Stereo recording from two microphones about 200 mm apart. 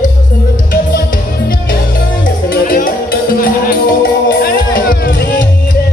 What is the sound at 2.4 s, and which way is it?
Music, 45° left (ahead or behind).